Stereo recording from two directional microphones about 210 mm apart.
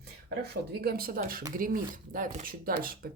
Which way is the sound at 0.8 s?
45° right (ahead or behind).